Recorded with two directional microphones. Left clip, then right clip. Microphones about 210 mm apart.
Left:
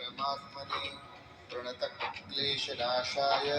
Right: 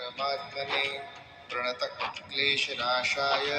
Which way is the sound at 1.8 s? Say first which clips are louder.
Right 3 dB; 35° right (ahead or behind).